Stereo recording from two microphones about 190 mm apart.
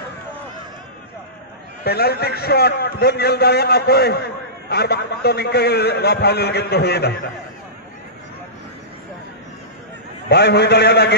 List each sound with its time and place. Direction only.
1.9 s a man's voice: 55° left (ahead or behind)
10.3 s a man's voice: 60° left (ahead or behind)